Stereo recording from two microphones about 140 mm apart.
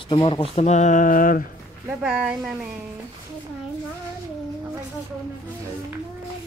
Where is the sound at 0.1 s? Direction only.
40° left (ahead or behind); by 1.4 s 75° left (ahead or behind).